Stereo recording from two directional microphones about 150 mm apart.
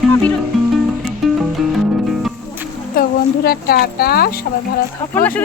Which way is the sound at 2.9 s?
90° left.